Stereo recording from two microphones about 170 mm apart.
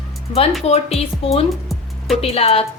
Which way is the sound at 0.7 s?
35° left (ahead or behind).